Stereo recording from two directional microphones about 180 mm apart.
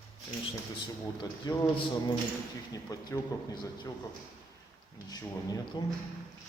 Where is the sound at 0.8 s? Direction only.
25° left (ahead or behind).